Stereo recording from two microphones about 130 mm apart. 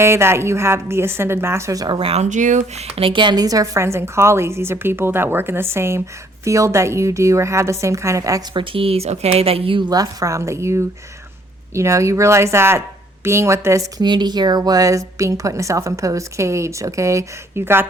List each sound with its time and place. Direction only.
0.0 s a woman's voice: 20° right (ahead or behind)
2.0 s speech: 45° right (ahead or behind)
2.2 s speech: 70° right (ahead or behind)
2.9 s a woman's voice: 45° right (ahead or behind); by 8.4 s 25° right (ahead or behind)
8.5 s a woman's voice: 45° right (ahead or behind); by 13.8 s 20° right (ahead or behind)
14.0 s a woman's voice: 35° right (ahead or behind); by 17.7 s 20° right (ahead or behind)